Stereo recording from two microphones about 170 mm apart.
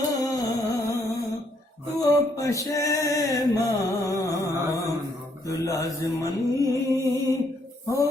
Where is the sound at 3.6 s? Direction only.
20° left (ahead or behind).